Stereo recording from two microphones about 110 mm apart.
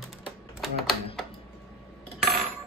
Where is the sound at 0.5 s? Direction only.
Centre (ahead or behind).